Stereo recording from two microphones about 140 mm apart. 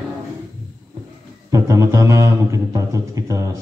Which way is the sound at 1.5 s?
20° right (ahead or behind).